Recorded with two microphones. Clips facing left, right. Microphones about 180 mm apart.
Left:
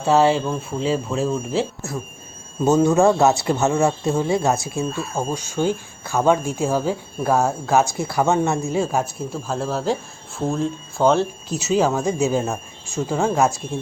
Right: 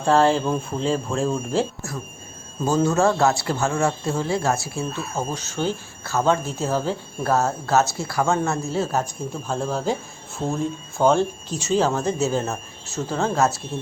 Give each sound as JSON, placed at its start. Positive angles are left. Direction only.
{"t": 0.0, "sound": "speech", "side_deg": 5}
{"t": 0.4, "sound": "speech", "side_deg": -5}
{"t": 2.6, "sound": "speech", "side_deg": 20}
{"t": 4.8, "sound": "speech", "side_deg": 0}
{"t": 5.3, "sound": "speech", "side_deg": 10}